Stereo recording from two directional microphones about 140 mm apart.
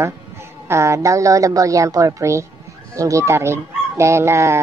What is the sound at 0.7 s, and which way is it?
Speech, 20° right (ahead or behind).